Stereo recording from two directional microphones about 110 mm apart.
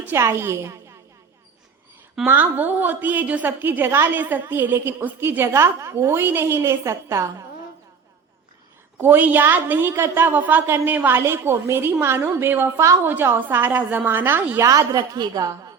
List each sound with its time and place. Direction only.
0.0 s a woman's voice: 20° right (ahead or behind)
2.2 s a woman's voice: 15° right (ahead or behind)
9.0 s a woman's voice: 20° right (ahead or behind)
14.7 s a woman's voice: 30° right (ahead or behind)